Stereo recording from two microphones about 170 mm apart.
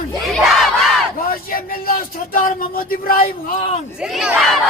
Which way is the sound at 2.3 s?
55° left (ahead or behind).